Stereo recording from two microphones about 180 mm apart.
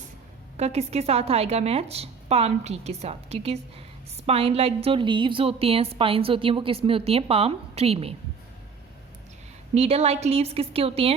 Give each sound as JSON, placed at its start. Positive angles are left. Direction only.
{"t": 0.5, "sound": "a woman's voice", "side_deg": -35}
{"t": 9.7, "sound": "a woman's voice", "side_deg": -35}